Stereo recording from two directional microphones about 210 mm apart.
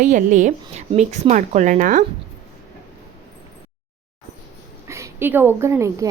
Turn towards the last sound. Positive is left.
turn(degrees=-15)  # may be behind; listen again after turning